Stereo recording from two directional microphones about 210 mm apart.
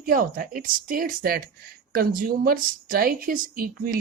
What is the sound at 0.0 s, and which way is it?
Speech, 40° right (ahead or behind).